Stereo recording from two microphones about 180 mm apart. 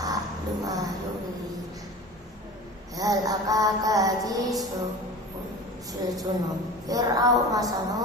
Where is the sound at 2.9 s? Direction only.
20° right (ahead or behind).